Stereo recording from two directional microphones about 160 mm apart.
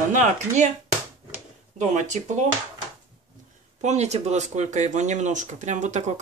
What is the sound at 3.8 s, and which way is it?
Speech, 45° right (ahead or behind).